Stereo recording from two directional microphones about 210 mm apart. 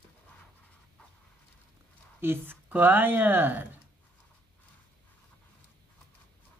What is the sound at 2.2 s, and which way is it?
Speech, 10° right (ahead or behind).